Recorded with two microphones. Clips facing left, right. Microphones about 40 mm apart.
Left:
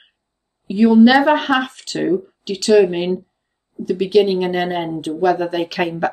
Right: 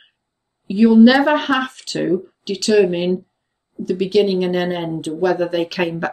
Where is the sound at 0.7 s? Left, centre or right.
Centre.